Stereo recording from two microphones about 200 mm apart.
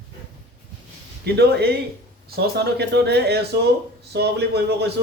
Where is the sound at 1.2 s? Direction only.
55° right (ahead or behind).